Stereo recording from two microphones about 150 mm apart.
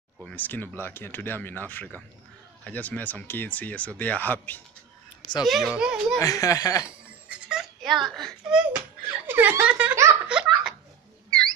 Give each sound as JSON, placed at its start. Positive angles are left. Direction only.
{"t": 0.2, "sound": "speech", "side_deg": 10}
{"t": 5.4, "sound": "a child's voice", "side_deg": 0}
{"t": 6.1, "sound": "speech", "side_deg": 20}
{"t": 7.2, "sound": "baby laughter", "side_deg": -5}
{"t": 8.2, "sound": "a child's voice", "side_deg": 0}
{"t": 10.2, "sound": "laughter", "side_deg": -5}
{"t": 11.2, "sound": "a sound", "side_deg": 5}